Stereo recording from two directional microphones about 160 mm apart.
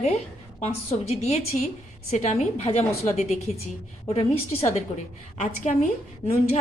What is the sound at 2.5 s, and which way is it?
A woman's voice, 40° left (ahead or behind).